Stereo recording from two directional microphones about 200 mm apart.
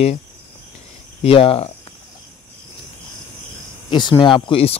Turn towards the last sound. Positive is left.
turn(degrees=25)  # may be behind; listen again after turning